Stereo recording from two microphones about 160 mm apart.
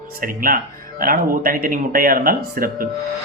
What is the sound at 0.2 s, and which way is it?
Speech, 60° right (ahead or behind).